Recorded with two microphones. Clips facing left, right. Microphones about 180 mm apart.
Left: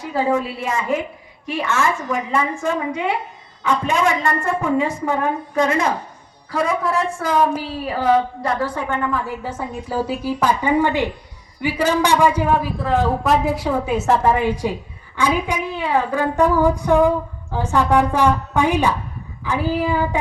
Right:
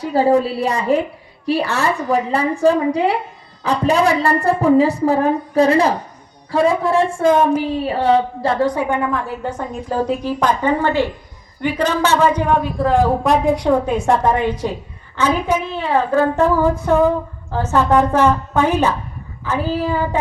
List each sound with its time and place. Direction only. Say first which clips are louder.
0.0 s a woman's voice: right 5 dB; 35° right (ahead or behind)
8.7 s a woman's voice: right 4 dB; 15° right (ahead or behind)
9.1 s a woman's voice: right 2 dB; 5° left (ahead or behind)